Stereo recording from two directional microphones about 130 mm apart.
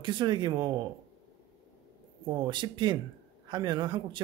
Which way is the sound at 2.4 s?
35° right (ahead or behind).